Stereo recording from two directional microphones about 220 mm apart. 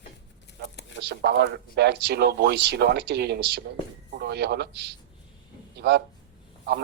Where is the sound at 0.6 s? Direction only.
50° right (ahead or behind).